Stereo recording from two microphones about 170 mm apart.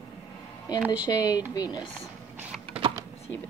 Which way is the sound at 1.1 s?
20° left (ahead or behind).